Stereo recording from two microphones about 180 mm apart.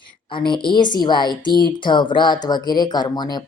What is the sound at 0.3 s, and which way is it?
A woman's voice, 25° left (ahead or behind).